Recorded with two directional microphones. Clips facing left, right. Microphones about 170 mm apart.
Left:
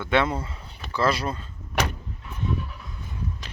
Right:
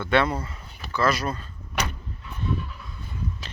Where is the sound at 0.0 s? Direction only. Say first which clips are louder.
Right 1 dB; 20° left (ahead or behind).